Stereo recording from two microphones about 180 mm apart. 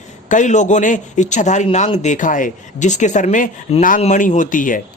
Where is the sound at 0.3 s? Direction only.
45° left (ahead or behind).